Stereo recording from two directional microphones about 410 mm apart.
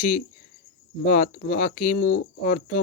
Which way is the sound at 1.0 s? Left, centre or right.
Centre.